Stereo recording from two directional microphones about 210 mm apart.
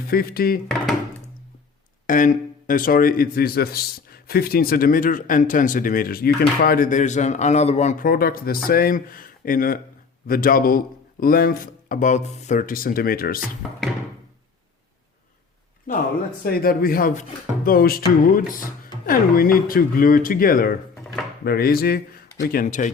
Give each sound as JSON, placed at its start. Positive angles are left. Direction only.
{"t": 0.1, "sound": "speech", "side_deg": 45}
{"t": 2.0, "sound": "a man's voice", "side_deg": 40}
{"t": 15.9, "sound": "a man's voice", "side_deg": 40}